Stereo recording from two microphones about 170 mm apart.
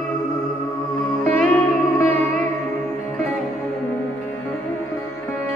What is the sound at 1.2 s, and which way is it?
Music, 10° left (ahead or behind).